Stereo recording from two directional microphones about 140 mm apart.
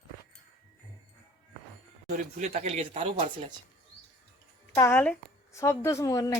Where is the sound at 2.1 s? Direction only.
55° right (ahead or behind).